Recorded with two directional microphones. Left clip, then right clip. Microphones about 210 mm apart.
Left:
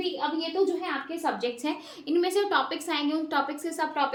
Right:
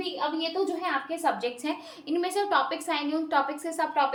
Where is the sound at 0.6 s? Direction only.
5° left (ahead or behind).